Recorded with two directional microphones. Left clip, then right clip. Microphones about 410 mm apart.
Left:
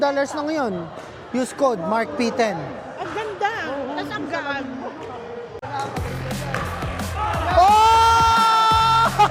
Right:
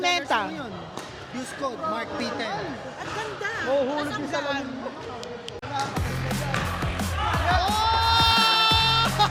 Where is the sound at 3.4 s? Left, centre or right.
Left.